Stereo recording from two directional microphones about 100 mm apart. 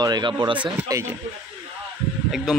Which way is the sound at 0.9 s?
35° right (ahead or behind).